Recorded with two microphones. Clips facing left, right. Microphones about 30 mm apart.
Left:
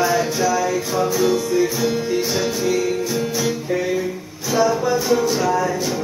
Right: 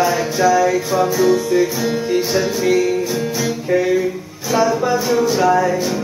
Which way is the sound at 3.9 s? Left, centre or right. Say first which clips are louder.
Right 5 dB; centre.